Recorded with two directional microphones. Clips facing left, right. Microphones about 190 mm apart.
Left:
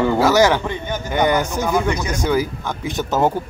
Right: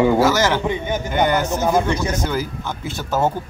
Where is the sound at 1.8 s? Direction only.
15° left (ahead or behind).